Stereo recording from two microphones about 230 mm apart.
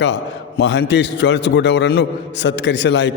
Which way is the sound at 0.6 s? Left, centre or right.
Left.